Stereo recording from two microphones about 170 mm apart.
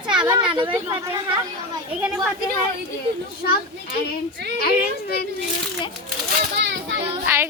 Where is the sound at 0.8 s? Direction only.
15° right (ahead or behind).